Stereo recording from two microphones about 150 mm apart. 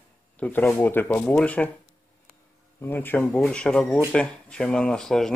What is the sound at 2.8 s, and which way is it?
Speech, 15° left (ahead or behind).